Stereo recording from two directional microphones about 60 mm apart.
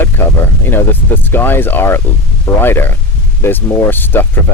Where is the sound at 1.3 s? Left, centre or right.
Left.